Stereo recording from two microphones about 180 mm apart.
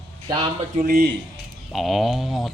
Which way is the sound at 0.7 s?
50° right (ahead or behind).